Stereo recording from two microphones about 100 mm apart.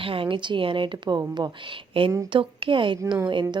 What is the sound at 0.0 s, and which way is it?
A woman's voice, 65° right (ahead or behind).